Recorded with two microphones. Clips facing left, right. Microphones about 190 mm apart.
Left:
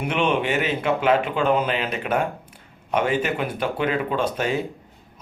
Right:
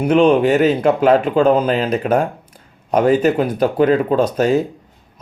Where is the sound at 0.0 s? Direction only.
40° right (ahead or behind).